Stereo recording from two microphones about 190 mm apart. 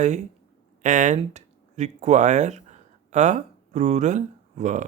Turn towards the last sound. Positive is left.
turn(degrees=-40)  # may be behind; listen again after turning